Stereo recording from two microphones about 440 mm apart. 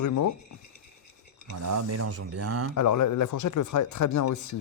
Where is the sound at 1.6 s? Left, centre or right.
Right.